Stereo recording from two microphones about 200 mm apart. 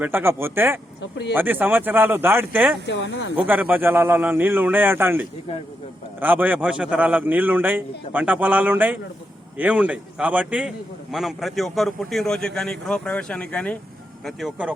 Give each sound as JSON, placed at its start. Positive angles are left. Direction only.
{"t": 0.0, "sound": "a man's voice", "side_deg": -10}
{"t": 2.8, "sound": "speech", "side_deg": 65}
{"t": 3.3, "sound": "a man's voice", "side_deg": -10}